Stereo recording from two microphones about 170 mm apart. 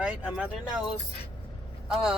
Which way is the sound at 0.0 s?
5° right (ahead or behind).